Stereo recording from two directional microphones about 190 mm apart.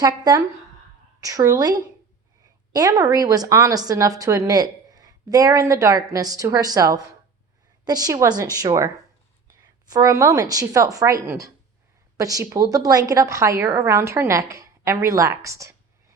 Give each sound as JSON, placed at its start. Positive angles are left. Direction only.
{"t": 0.0, "sound": "a woman's voice", "side_deg": -20}
{"t": 9.9, "sound": "a woman's voice", "side_deg": -15}